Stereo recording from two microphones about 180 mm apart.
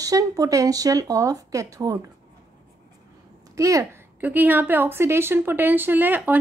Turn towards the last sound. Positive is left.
turn(degrees=-10)  # may be behind; listen again after turning